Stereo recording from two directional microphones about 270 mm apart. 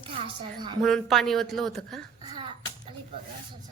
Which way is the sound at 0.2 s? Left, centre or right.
Centre.